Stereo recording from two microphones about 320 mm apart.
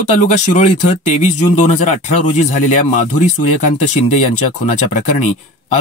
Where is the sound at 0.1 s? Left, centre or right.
Left.